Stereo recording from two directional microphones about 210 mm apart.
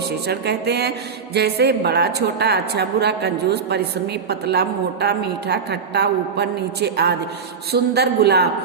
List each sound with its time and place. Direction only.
0.3 s speech: 50° right (ahead or behind)